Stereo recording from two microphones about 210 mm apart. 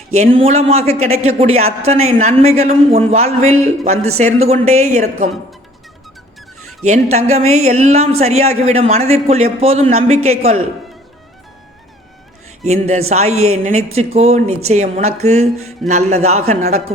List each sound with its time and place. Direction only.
0.1 s speech: 30° right (ahead or behind)
6.8 s speech: 35° right (ahead or behind)
12.6 s speech: 30° right (ahead or behind)